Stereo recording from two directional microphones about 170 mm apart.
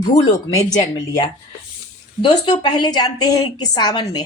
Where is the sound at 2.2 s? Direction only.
25° left (ahead or behind).